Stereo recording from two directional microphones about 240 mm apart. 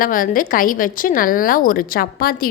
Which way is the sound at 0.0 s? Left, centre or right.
Left.